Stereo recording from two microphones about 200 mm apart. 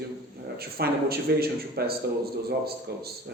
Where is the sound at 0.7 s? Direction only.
50° right (ahead or behind).